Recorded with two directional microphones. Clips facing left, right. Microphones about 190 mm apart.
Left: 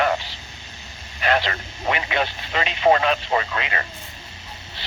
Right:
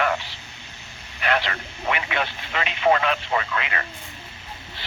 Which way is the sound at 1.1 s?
40° left (ahead or behind).